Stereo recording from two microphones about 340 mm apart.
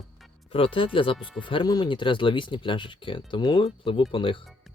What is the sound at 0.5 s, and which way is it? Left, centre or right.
Speech, centre.